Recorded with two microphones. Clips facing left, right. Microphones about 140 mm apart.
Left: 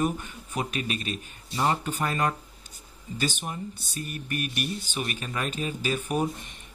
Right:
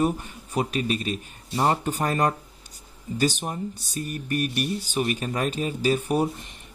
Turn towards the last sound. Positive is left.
turn(degrees=-35)  # may be behind; listen again after turning